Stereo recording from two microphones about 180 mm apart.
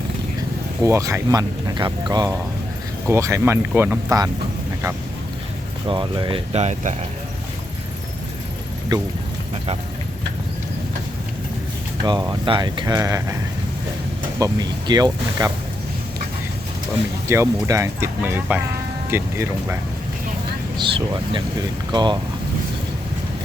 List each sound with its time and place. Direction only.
0.8 s speech: 15° right (ahead or behind)
5.9 s speech: 30° right (ahead or behind)
12.0 s speech: 25° right (ahead or behind)
14.3 s speech: 20° right (ahead or behind)
17.2 s speech: 15° right (ahead or behind)
20.7 s speech: 25° right (ahead or behind)